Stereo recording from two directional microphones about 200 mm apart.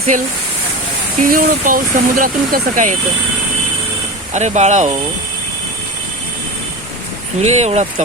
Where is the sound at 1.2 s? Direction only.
45° right (ahead or behind).